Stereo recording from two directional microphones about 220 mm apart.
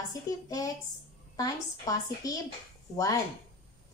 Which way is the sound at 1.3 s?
15° left (ahead or behind).